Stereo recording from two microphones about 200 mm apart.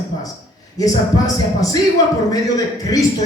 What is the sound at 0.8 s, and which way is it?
Speech, 20° left (ahead or behind).